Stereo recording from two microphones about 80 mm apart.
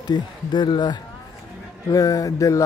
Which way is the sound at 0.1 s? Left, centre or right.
Left.